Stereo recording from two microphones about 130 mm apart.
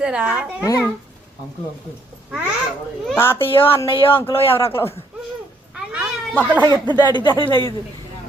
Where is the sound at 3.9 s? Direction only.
40° left (ahead or behind).